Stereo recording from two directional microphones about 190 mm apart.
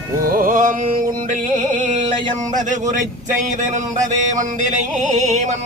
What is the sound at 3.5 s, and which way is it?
Speech, 40° right (ahead or behind).